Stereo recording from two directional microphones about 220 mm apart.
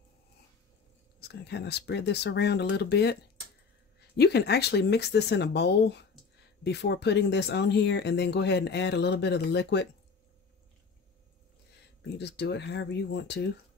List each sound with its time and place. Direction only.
1.2 s speech: 50° left (ahead or behind)
4.2 s speech: 50° left (ahead or behind)
12.2 s speech: 50° left (ahead or behind)